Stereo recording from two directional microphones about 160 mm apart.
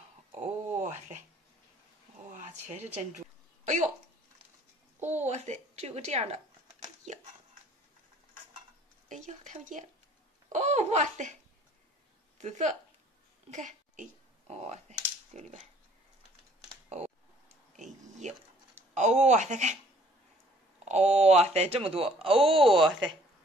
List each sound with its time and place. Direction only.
0.3 s a sound: 50° right (ahead or behind)
2.9 s a sound: 45° right (ahead or behind)
5.0 s a child's voice: 45° right (ahead or behind)
9.1 s a child's voice: 50° right (ahead or behind)
12.4 s a child's voice: 50° right (ahead or behind)
17.7 s a sound: 45° right (ahead or behind)
18.9 s a child's voice: 45° right (ahead or behind)
20.8 s speech: 45° right (ahead or behind)
22.5 s speech: centre (ahead or behind)